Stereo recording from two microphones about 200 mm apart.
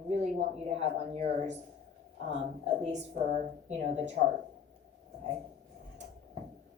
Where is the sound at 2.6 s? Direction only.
35° right (ahead or behind).